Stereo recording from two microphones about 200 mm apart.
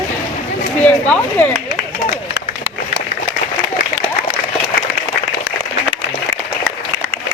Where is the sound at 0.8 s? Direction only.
5° left (ahead or behind).